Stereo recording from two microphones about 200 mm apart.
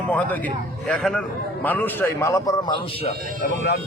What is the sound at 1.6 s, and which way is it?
A man's voice, 10° left (ahead or behind).